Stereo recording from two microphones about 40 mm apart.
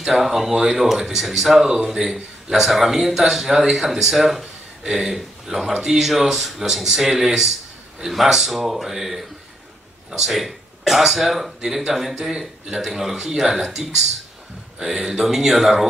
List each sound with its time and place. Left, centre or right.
0.0 s speech: centre
0.5 s speech: centre
0.7 s speech: centre